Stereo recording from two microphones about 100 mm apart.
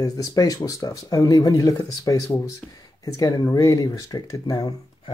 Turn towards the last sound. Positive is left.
turn(degrees=40)  # may be behind; listen again after turning